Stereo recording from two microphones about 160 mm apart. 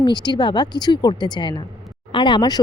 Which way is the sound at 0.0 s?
25° left (ahead or behind).